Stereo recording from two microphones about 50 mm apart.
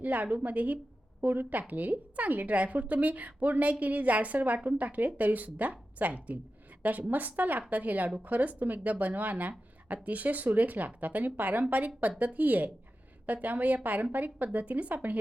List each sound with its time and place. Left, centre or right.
0.0 s a woman's voice: right